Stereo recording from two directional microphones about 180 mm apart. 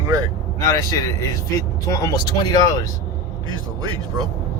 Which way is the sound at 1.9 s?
20° left (ahead or behind).